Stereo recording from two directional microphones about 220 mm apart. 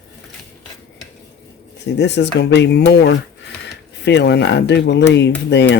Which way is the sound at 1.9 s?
50° left (ahead or behind).